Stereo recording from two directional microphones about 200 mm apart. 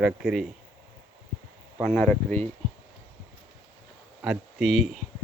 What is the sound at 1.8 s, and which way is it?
Speech, 10° left (ahead or behind).